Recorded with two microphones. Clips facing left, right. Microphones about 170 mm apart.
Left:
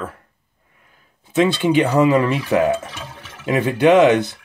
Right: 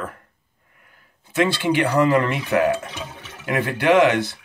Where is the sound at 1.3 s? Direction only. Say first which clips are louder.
Left 4 dB; 20° left (ahead or behind).